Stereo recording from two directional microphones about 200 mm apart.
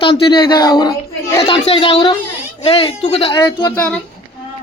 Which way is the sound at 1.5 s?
30° left (ahead or behind).